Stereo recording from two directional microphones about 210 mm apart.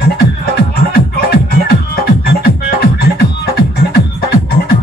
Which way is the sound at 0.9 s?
50° left (ahead or behind).